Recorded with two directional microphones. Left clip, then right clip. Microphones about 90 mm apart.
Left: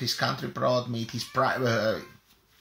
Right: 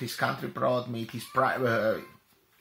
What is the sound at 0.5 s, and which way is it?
Speech, 15° left (ahead or behind).